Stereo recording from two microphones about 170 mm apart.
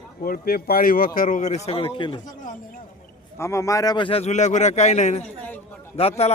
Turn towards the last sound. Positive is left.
turn(degrees=35)  # may be behind; listen again after turning